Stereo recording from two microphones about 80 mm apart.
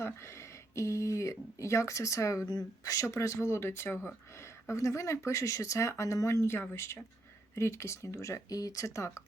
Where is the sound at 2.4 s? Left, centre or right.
Left.